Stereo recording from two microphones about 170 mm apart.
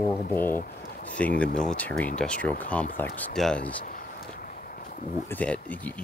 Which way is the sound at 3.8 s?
55° left (ahead or behind).